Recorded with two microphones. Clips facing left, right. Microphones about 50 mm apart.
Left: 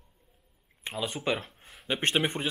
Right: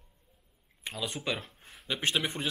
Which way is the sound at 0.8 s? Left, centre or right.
Centre.